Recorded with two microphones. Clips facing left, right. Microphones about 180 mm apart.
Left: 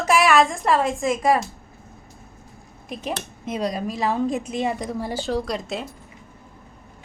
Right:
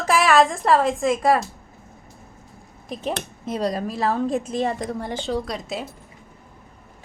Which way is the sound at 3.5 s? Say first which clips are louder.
Right 1 dB; centre (ahead or behind).